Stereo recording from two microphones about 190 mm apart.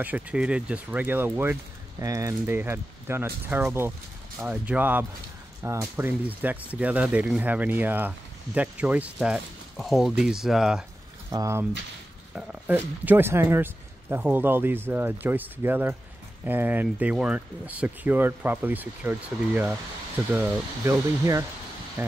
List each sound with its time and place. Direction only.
0.0 s speech: 5° right (ahead or behind)
11.3 s speech: 15° right (ahead or behind)